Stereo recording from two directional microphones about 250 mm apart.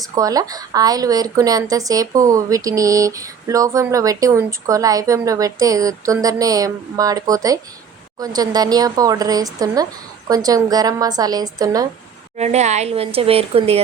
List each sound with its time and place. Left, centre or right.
0.0 s a woman's voice: centre
12.4 s a woman's voice: right